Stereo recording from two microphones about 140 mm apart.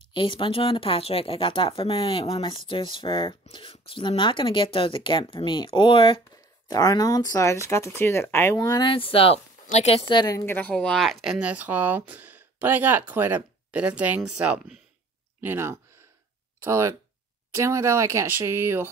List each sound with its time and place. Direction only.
0.1 s speech: 35° left (ahead or behind)
6.7 s speech: 25° left (ahead or behind)
8.8 s speech: 40° left (ahead or behind)
10.4 s speech: 15° left (ahead or behind); by 18.9 s 15° right (ahead or behind)